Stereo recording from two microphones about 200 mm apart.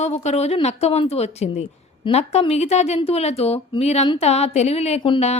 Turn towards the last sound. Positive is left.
turn(degrees=30)  # may be behind; listen again after turning